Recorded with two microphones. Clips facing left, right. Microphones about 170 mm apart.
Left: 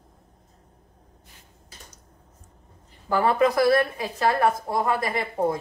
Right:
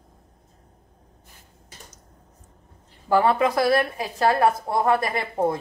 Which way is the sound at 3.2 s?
30° right (ahead or behind).